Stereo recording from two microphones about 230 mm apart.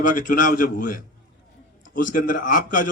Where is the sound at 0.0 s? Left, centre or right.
Left.